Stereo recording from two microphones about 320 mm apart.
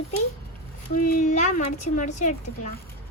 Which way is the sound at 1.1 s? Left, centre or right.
Left.